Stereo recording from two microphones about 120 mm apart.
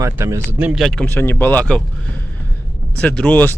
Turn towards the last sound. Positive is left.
turn(degrees=15)  # may be behind; listen again after turning